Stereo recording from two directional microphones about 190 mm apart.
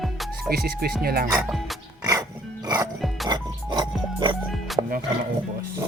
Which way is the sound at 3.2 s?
25° right (ahead or behind).